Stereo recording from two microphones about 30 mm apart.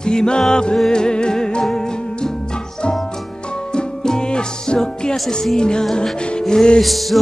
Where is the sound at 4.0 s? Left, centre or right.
Left.